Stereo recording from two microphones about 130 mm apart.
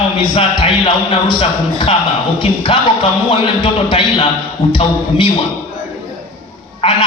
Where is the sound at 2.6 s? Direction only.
40° left (ahead or behind).